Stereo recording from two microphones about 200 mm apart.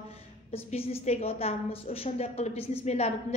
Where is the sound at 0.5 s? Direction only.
30° left (ahead or behind).